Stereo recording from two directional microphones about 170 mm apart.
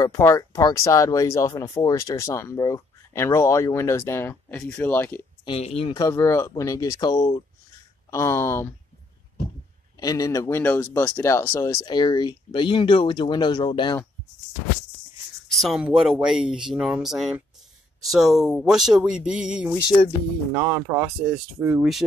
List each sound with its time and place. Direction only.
0.0 s speech: 15° left (ahead or behind)
5.4 s speech: 35° left (ahead or behind)
5.9 s speech: 15° left (ahead or behind)
9.9 s speech: 20° left (ahead or behind)
15.4 s speech: centre (ahead or behind)
19.8 s speech: 25° left (ahead or behind)
20.5 s speech: 15° right (ahead or behind)